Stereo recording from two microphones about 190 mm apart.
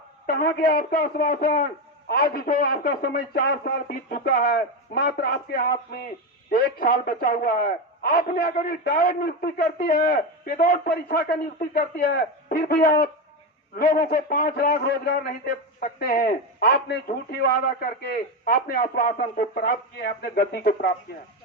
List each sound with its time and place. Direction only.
0.3 s a man's voice: 55° left (ahead or behind)